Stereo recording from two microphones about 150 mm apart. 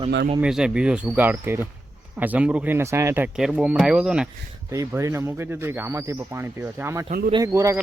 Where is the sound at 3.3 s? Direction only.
5° right (ahead or behind).